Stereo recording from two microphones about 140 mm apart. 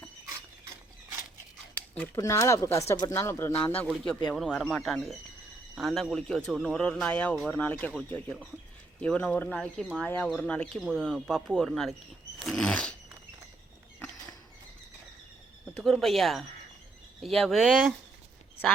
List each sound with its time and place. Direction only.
2.1 s speech: 25° left (ahead or behind); by 12.9 s 5° left (ahead or behind)
15.7 s speech: centre (ahead or behind)